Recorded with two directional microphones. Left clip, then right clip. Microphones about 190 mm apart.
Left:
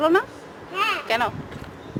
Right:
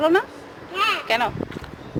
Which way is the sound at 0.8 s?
25° right (ahead or behind).